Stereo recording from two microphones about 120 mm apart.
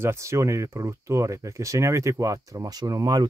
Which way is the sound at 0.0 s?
25° right (ahead or behind).